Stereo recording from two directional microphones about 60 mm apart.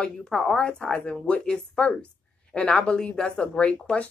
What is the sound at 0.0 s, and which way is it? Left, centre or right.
Speech, centre.